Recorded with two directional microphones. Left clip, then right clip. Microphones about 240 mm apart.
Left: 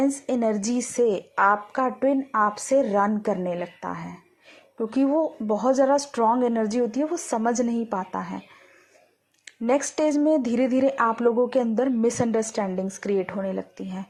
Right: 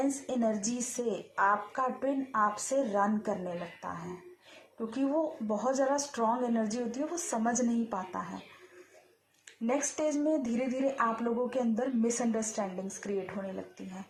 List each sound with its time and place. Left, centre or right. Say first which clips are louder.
0.3 s speech: left 7 dB; left
9.6 s speech: left 9 dB; left